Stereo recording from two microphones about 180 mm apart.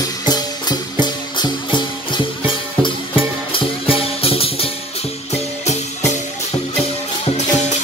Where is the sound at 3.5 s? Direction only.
30° left (ahead or behind).